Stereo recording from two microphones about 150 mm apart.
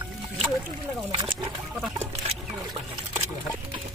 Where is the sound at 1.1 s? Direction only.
35° right (ahead or behind).